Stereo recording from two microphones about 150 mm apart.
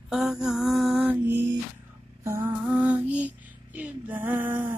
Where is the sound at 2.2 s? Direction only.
15° right (ahead or behind).